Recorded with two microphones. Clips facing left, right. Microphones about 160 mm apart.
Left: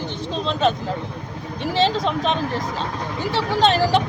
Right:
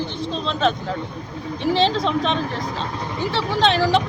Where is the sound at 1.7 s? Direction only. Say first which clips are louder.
Even; 40° left (ahead or behind).